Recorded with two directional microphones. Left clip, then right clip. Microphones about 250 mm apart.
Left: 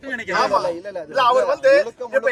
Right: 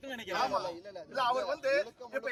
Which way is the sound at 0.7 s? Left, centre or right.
Left.